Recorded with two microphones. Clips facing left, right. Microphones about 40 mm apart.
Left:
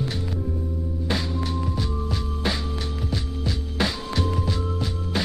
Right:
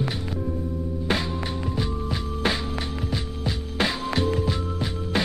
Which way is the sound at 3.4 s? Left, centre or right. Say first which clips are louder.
Right 1 dB; centre.